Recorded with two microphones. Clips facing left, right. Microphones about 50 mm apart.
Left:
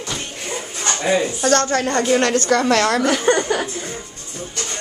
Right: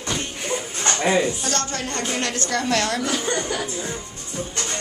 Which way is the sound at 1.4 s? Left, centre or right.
Left.